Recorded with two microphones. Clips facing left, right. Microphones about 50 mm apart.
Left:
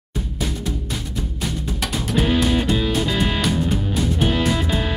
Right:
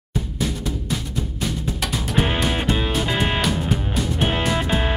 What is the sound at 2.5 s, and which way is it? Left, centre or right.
Music, right.